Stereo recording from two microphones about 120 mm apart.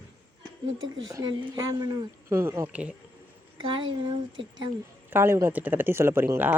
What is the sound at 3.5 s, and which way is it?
Speech, 40° right (ahead or behind).